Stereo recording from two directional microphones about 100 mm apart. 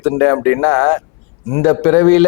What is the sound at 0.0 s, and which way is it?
A man's voice, 20° left (ahead or behind).